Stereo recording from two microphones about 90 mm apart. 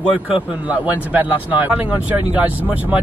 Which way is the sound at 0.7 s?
15° right (ahead or behind).